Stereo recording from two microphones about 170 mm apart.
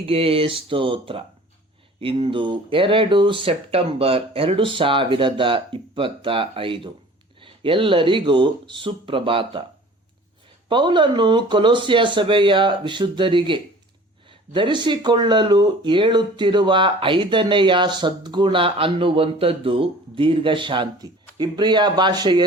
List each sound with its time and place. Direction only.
0.0 s speech: 35° right (ahead or behind)
10.7 s speech: 30° right (ahead or behind)